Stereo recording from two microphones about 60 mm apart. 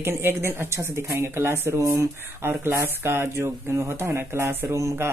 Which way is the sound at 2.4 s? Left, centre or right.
Right.